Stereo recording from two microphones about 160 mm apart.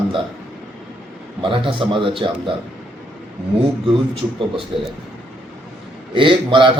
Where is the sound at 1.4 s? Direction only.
35° right (ahead or behind).